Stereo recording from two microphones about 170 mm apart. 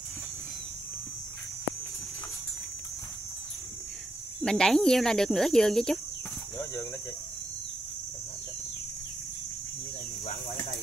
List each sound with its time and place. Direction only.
4.4 s speech: 5° left (ahead or behind)
6.6 s speech: 20° left (ahead or behind)